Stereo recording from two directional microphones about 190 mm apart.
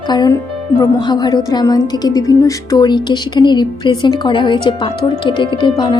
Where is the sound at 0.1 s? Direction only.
20° left (ahead or behind).